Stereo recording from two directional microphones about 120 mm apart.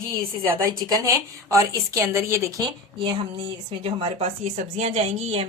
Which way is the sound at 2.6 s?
40° right (ahead or behind).